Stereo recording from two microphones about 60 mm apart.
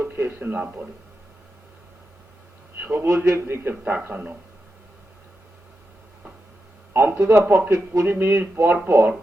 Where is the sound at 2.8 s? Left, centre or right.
Right.